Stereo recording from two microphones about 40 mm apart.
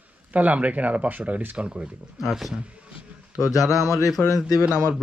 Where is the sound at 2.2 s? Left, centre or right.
Centre.